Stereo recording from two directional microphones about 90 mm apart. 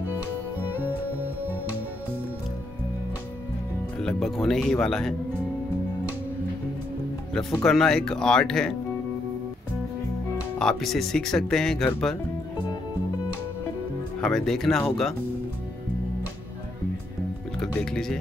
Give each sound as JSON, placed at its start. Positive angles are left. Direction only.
{"t": 4.0, "sound": "speech", "side_deg": 5}
{"t": 7.3, "sound": "speech", "side_deg": 5}
{"t": 10.6, "sound": "speech", "side_deg": 5}
{"t": 14.2, "sound": "speech", "side_deg": 5}
{"t": 17.6, "sound": "speech", "side_deg": 5}